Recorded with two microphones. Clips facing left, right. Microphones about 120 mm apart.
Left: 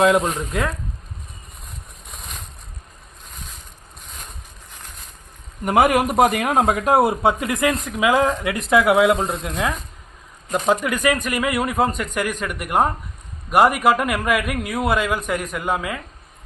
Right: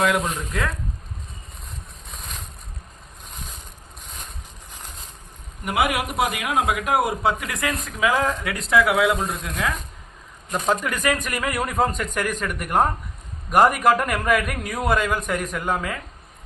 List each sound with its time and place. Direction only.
0.0 s a man's voice: 25° left (ahead or behind)
5.6 s a man's voice: 45° left (ahead or behind); by 9.6 s 25° left (ahead or behind)
10.5 s speech: 10° left (ahead or behind)